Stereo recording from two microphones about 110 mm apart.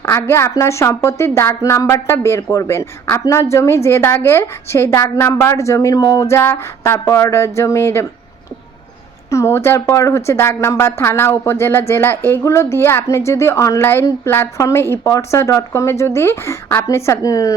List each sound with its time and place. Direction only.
0.0 s a woman's voice: 20° left (ahead or behind)
9.3 s a woman's voice: 25° left (ahead or behind)